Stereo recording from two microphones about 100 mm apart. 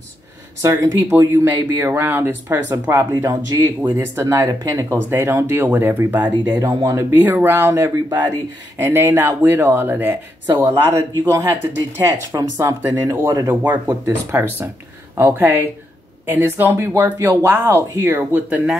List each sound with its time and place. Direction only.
0.6 s speech: 30° right (ahead or behind)
1.5 s speech: 20° right (ahead or behind)
5.1 s speech: 25° right (ahead or behind)
6.7 s speech: 40° right (ahead or behind)
7.1 s speech: 20° right (ahead or behind)
10.4 s speech: 40° right (ahead or behind)
10.7 s speech: 25° right (ahead or behind)
14.3 s speech: 25° right (ahead or behind)